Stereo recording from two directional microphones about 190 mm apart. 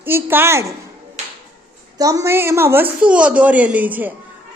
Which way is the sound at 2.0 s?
20° right (ahead or behind).